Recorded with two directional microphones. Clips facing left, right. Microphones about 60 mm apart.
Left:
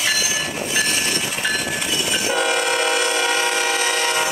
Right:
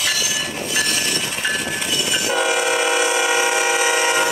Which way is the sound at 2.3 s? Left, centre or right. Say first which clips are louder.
Right 1 dB; centre.